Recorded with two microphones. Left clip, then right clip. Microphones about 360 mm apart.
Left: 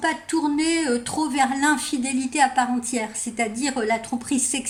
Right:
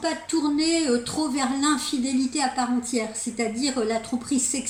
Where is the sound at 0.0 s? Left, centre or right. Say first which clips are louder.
Left 2 dB; centre.